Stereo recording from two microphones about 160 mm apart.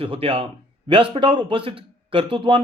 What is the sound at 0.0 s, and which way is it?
Speech, 35° right (ahead or behind).